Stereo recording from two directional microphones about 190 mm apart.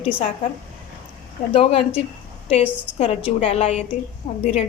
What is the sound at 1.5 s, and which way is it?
A woman's voice, 30° left (ahead or behind).